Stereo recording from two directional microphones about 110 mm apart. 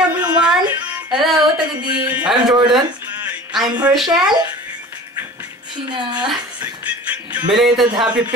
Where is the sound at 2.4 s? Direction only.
45° right (ahead or behind).